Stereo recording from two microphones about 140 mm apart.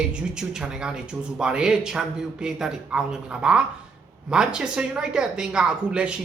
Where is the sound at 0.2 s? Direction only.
5° right (ahead or behind).